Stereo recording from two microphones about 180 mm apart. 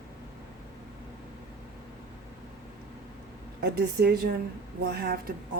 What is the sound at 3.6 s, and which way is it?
A woman's voice, 65° right (ahead or behind).